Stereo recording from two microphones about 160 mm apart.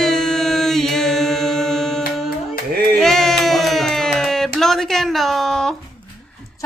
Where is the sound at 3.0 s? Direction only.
Centre (ahead or behind).